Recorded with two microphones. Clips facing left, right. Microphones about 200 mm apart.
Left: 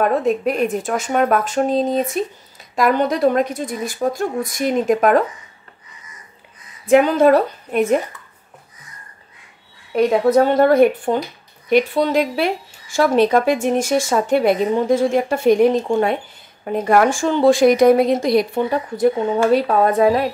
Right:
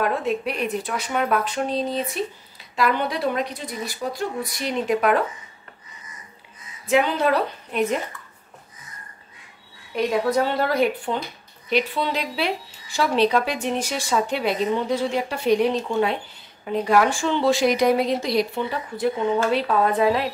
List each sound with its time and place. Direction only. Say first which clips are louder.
0.0 s speech: left 6 dB; 45° left (ahead or behind)
6.9 s speech: left 8 dB; 45° left (ahead or behind)
9.9 s speech: left 7 dB; 45° left (ahead or behind)